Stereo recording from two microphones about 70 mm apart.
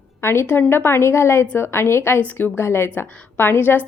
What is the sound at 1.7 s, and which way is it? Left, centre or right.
A woman's voice, left.